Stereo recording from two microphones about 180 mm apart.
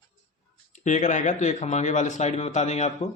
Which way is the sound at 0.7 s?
45° left (ahead or behind).